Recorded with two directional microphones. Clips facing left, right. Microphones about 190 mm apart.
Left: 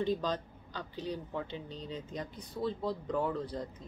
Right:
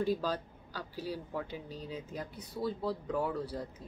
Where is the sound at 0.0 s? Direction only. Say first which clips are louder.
Even; 10° right (ahead or behind).